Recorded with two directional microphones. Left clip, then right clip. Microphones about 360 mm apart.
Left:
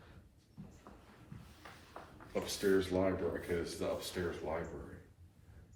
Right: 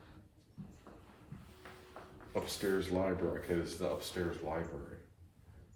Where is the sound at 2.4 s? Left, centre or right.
Right.